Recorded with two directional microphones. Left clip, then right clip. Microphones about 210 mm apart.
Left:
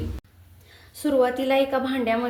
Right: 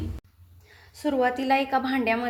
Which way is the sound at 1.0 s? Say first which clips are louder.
Left 3 dB; 35° right (ahead or behind).